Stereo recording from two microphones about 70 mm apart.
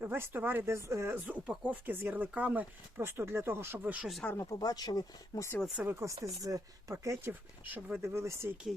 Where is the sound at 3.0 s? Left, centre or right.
Right.